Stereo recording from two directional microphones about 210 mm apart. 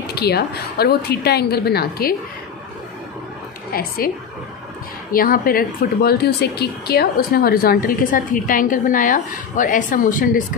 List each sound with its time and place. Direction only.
0.0 s speech: 50° left (ahead or behind)
3.7 s speech: 45° left (ahead or behind)
5.1 s speech: 45° left (ahead or behind)